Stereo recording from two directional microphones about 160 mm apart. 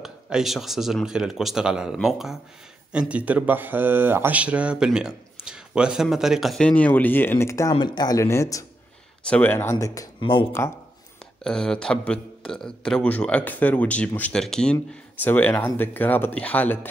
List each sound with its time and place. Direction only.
0.0 s speech: 5° right (ahead or behind); by 7.7 s 20° left (ahead or behind)
7.7 s speech: 30° left (ahead or behind)
11.4 s speech: 5° left (ahead or behind)